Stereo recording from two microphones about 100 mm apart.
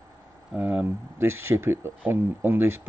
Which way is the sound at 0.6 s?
15° right (ahead or behind).